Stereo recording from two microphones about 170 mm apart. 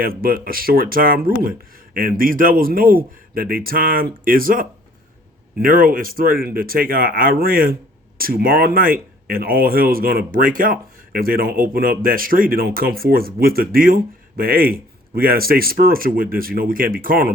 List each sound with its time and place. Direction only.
0.0 s speech: 60° right (ahead or behind)